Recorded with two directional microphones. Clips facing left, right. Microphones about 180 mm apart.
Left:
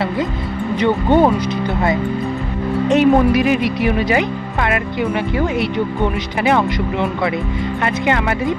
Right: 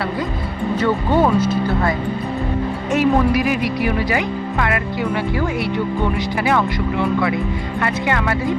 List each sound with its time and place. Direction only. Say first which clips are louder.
0.8 s speech: left 4 dB; 15° left (ahead or behind)